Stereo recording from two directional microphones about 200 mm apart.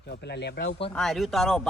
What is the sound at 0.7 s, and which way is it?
Speech, 25° left (ahead or behind).